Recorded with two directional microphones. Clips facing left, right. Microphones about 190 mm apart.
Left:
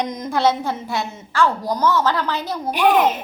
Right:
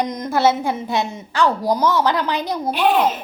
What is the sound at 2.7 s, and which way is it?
Speech, 15° left (ahead or behind).